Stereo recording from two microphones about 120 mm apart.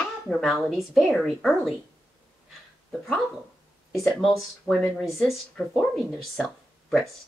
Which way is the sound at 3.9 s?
Centre (ahead or behind).